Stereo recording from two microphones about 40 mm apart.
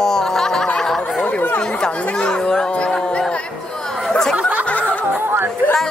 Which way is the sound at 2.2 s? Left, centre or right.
Left.